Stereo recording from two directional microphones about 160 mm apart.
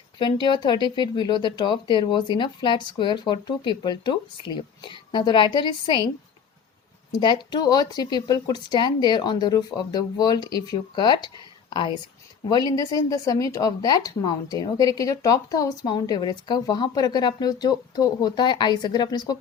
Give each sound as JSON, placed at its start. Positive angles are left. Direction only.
{"t": 0.2, "sound": "a woman's voice", "side_deg": 30}
{"t": 7.2, "sound": "a woman's voice", "side_deg": 30}